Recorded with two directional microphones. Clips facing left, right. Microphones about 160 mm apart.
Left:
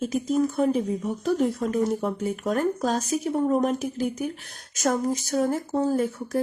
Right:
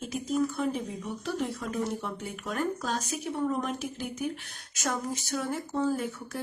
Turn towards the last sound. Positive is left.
turn(degrees=40)  # may be behind; listen again after turning